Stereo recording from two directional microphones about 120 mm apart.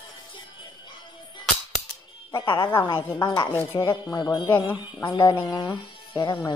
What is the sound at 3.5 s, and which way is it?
Speech, 20° left (ahead or behind).